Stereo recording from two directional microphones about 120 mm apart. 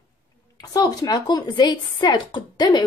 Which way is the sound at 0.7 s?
30° left (ahead or behind).